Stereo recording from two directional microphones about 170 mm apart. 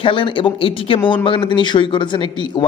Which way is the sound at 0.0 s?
30° left (ahead or behind).